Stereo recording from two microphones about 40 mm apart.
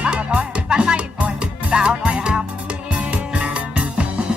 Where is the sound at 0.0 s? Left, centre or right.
Right.